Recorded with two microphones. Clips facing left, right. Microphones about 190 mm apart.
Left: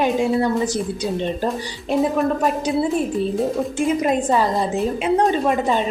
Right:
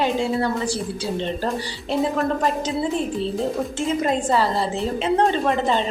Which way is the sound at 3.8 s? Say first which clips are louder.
Left 3 dB; 15° left (ahead or behind).